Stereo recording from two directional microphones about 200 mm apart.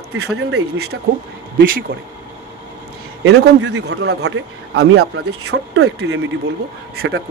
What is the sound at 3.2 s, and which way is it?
A man's voice, 60° right (ahead or behind).